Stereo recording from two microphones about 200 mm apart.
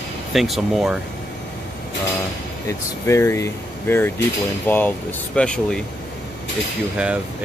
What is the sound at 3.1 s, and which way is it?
Speech, 15° left (ahead or behind).